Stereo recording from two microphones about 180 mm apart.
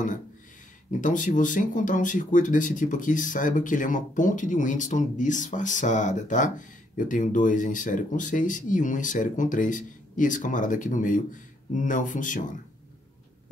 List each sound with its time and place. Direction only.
1.0 s speech: 45° left (ahead or behind)